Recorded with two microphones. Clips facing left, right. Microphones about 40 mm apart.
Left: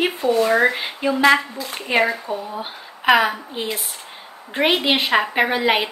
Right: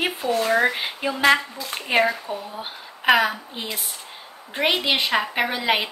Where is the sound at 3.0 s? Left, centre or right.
Centre.